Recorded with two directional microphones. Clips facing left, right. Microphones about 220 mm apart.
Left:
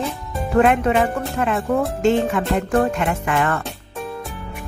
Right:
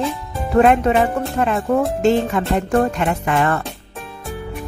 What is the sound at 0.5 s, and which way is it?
Music, 35° right (ahead or behind).